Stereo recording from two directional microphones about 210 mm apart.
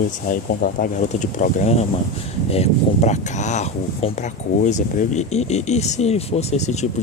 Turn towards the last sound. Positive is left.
turn(degrees=35)  # may be behind; listen again after turning